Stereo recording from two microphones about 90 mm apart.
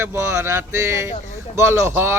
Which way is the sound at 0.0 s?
30° right (ahead or behind).